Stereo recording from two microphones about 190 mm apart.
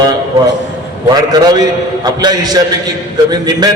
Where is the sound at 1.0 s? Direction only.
20° right (ahead or behind).